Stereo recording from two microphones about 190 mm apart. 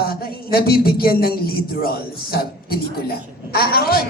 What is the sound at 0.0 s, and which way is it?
A woman's voice, 55° left (ahead or behind).